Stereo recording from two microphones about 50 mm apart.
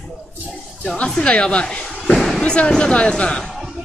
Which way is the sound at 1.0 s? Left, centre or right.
Centre.